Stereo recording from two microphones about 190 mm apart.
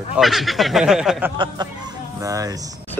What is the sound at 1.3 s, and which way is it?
A man's voice, 25° right (ahead or behind).